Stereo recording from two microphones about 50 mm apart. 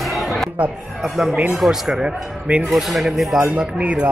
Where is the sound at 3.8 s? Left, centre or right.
Right.